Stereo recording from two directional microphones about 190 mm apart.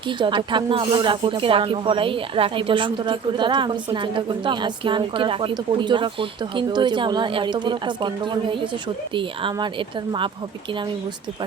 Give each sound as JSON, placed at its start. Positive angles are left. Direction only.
{"t": 0.2, "sound": "speech", "side_deg": -25}